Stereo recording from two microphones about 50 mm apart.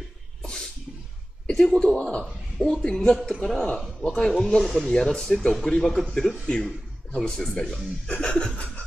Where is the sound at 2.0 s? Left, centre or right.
Centre.